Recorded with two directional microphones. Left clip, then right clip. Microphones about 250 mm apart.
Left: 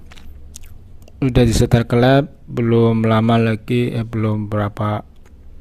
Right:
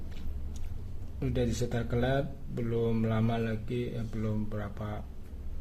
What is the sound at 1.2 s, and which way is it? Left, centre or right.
Speech, left.